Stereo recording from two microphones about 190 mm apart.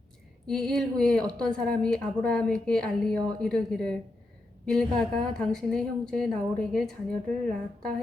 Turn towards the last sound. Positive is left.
turn(degrees=5)  # may be behind; listen again after turning